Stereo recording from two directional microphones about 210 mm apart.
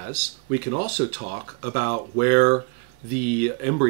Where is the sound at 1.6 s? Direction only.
45° right (ahead or behind).